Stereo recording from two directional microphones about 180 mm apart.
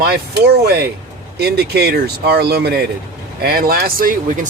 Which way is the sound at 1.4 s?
60° right (ahead or behind).